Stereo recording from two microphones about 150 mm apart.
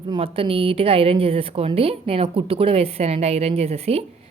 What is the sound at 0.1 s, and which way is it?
A woman's voice, 40° right (ahead or behind).